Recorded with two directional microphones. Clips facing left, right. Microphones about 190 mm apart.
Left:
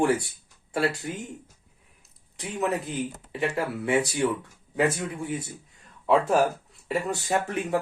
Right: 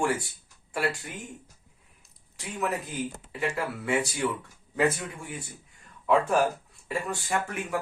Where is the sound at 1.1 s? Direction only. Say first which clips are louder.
Left 7 dB; 25° left (ahead or behind).